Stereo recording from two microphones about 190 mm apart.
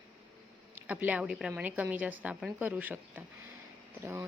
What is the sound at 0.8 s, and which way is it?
A woman's voice, 5° right (ahead or behind).